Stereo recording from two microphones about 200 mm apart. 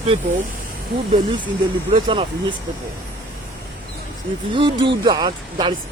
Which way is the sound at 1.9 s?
25° right (ahead or behind).